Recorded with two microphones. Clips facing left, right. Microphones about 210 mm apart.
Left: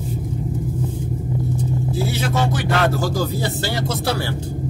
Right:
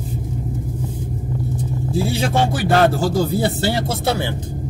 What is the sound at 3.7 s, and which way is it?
Speech, 25° right (ahead or behind).